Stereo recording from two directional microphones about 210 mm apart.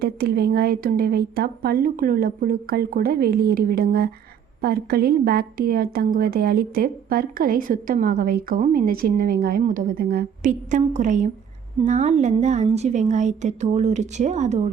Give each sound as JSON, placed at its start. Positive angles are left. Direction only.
{"t": 0.0, "sound": "a woman's voice", "side_deg": -50}